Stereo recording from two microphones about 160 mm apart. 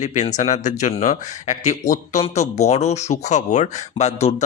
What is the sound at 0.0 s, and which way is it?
Speech, 45° left (ahead or behind).